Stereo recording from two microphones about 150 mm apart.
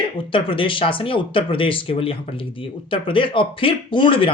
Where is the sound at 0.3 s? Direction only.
35° left (ahead or behind).